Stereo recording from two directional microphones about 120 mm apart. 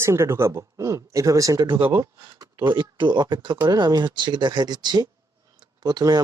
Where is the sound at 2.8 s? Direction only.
40° right (ahead or behind).